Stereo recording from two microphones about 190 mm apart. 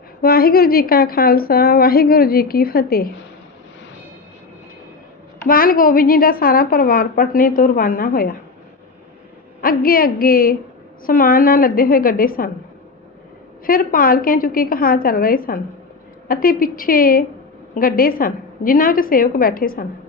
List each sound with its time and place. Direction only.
0.2 s a woman's voice: 50° left (ahead or behind)
5.5 s a woman's voice: 50° left (ahead or behind)
9.6 s a woman's voice: 50° left (ahead or behind)
13.7 s a woman's voice: 50° left (ahead or behind)